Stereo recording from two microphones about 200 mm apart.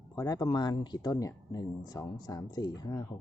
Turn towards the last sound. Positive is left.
turn(degrees=20)  # may be behind; listen again after turning